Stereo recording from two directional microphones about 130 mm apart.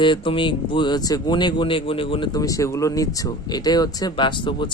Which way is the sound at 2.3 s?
25° left (ahead or behind).